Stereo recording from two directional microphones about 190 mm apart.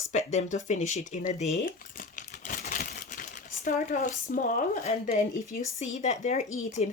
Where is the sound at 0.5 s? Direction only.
40° left (ahead or behind).